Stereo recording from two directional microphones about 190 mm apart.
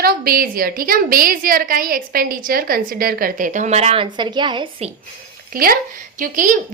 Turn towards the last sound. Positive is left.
turn(degrees=-45)  # may be behind; listen again after turning